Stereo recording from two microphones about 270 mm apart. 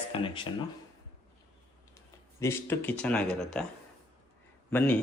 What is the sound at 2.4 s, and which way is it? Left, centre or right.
A man's voice, centre.